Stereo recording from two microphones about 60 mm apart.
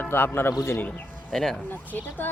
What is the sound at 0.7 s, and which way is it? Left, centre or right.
Speech, left.